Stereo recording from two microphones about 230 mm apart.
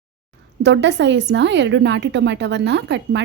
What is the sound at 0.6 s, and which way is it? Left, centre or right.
A woman's voice, right.